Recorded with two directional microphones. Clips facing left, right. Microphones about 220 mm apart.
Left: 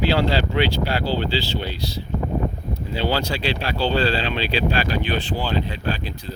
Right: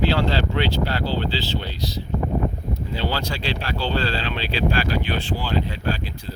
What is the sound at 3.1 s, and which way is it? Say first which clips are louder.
Speech: left 4 dB; 15° left (ahead or behind).